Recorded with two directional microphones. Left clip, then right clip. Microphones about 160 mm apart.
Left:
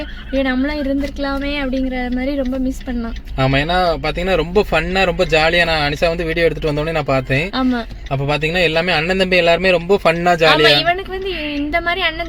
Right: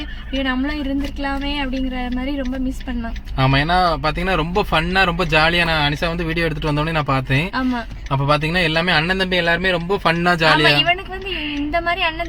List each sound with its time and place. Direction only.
0.4 s speech: 15° left (ahead or behind)
3.3 s a man's voice: 5° left (ahead or behind)
7.5 s speech: 20° left (ahead or behind)
8.1 s a man's voice: centre (ahead or behind)
11.7 s speech: 25° left (ahead or behind)